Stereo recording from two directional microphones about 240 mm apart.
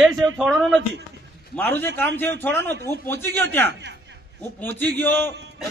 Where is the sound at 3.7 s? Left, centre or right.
Right.